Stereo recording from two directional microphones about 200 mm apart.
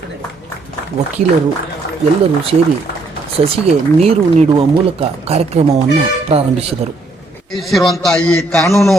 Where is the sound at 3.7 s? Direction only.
30° right (ahead or behind).